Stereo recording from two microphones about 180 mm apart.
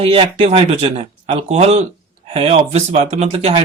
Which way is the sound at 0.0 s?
30° right (ahead or behind).